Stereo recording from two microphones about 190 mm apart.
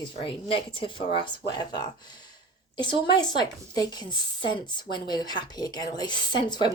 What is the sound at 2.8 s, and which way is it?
A woman's voice, 25° left (ahead or behind).